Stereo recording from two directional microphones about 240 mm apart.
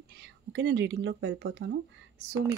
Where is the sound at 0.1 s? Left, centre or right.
Right.